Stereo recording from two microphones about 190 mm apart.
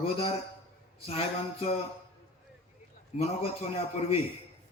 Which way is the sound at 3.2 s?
35° left (ahead or behind).